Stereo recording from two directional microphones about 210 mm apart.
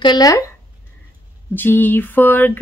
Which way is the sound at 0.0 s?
20° left (ahead or behind).